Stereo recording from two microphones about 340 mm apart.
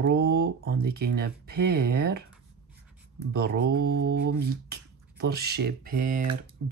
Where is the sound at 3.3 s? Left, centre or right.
Right.